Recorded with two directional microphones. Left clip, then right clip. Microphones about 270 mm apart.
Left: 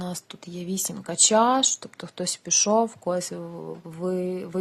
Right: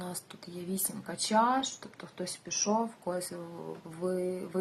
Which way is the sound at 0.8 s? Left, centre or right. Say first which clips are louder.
Left 17 dB; left.